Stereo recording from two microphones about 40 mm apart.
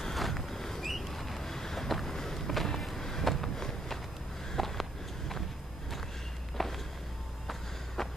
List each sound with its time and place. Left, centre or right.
0.0 s boat: centre
4.6 s a sound: centre
6.6 s walk: centre